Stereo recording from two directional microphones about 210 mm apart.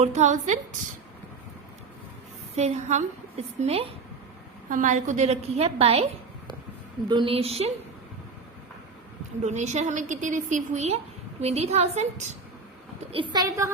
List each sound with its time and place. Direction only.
0.0 s a woman's voice: 35° right (ahead or behind)
2.6 s a woman's voice: 35° right (ahead or behind)
7.1 s a woman's voice: 25° right (ahead or behind)
9.4 s a woman's voice: 35° right (ahead or behind)
13.1 s a woman's voice: 20° right (ahead or behind)